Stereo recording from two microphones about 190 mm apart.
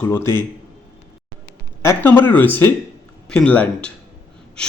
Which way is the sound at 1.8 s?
10° left (ahead or behind).